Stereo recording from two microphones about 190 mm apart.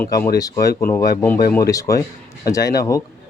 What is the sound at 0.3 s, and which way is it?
Speech, 20° left (ahead or behind).